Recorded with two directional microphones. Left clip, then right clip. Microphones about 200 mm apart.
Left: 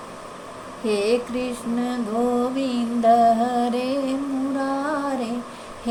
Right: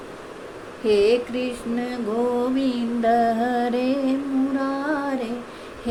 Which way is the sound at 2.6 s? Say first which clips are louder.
Left 1 dB; 25° right (ahead or behind).